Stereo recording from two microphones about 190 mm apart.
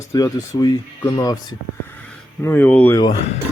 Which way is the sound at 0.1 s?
20° left (ahead or behind).